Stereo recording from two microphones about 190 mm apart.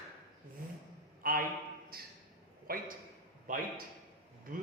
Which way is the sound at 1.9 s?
50° right (ahead or behind).